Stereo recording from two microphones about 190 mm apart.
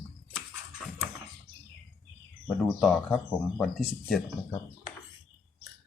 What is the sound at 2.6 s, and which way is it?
Speech, centre (ahead or behind).